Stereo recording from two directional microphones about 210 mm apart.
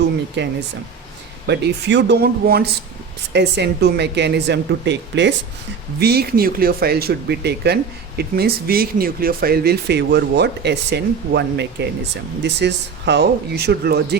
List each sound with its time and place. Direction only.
0.4 s speech: 55° right (ahead or behind)